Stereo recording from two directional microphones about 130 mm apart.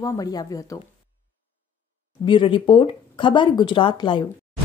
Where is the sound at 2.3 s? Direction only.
40° left (ahead or behind).